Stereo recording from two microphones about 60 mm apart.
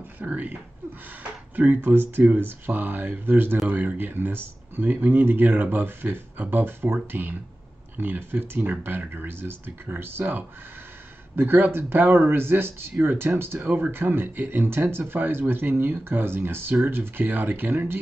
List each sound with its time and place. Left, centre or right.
0.2 s speech: right
1.6 s speech: right
13.6 s speech: right